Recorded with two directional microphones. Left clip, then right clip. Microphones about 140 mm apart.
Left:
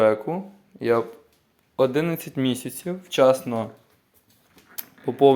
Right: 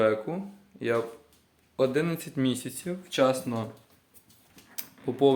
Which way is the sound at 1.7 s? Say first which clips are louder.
Left 5 dB; 30° left (ahead or behind).